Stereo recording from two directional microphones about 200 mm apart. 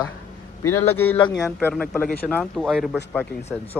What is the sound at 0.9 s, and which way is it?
Speech, 90° left.